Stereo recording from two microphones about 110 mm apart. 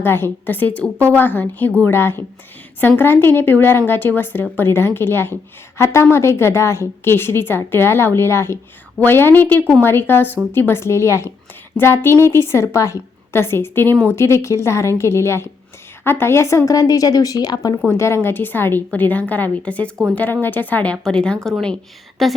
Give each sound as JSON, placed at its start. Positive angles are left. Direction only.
{"t": 0.0, "sound": "a woman's voice", "side_deg": 20}
{"t": 17.8, "sound": "a woman's voice", "side_deg": 25}